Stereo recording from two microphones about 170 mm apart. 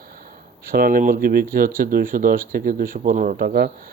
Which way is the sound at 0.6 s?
60° right (ahead or behind).